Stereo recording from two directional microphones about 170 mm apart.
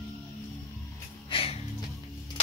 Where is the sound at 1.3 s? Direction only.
35° left (ahead or behind).